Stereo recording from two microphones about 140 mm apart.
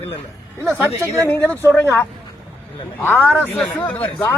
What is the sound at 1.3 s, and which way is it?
Speech, 15° left (ahead or behind).